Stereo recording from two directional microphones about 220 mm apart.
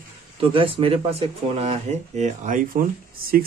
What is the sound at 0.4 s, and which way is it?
Speech, 25° right (ahead or behind).